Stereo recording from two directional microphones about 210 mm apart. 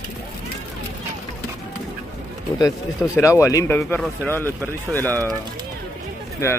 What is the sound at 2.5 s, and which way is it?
Speech, 15° left (ahead or behind).